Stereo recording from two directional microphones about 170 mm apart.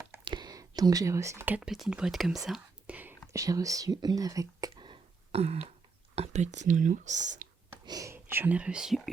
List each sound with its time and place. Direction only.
0.3 s speech: 25° right (ahead or behind)
4.7 s a sound: 30° right (ahead or behind)
6.1 s speech: 40° right (ahead or behind)
7.9 s speech: 20° right (ahead or behind); by 9.0 s 5° right (ahead or behind)